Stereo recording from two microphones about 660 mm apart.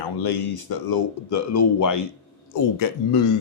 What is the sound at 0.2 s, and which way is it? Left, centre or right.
Speech, left.